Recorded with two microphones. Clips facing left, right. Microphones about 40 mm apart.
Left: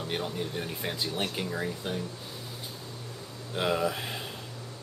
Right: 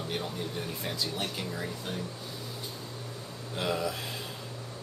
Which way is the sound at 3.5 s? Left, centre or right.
Centre.